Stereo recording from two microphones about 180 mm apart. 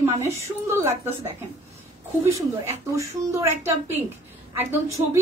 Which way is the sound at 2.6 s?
15° right (ahead or behind).